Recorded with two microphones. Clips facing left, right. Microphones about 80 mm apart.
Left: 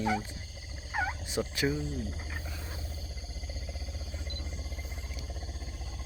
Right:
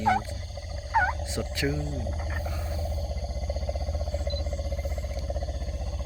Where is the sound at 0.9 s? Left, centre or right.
Right.